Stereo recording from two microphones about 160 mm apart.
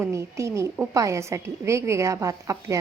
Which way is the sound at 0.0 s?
15° right (ahead or behind).